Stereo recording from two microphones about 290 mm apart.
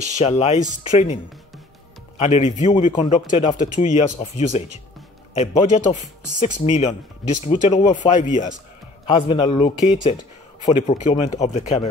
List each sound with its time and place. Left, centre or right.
0.2 s a man's voice: left